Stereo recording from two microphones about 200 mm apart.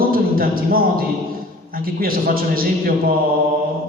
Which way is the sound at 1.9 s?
45° right (ahead or behind).